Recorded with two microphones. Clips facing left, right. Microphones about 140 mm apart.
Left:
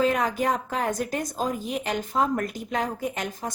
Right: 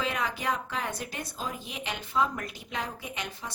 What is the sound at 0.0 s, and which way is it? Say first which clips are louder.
A woman's voice: left 8 dB; 45° left (ahead or behind).